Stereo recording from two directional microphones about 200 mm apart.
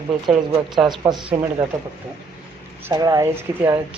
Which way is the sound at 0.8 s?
Centre (ahead or behind).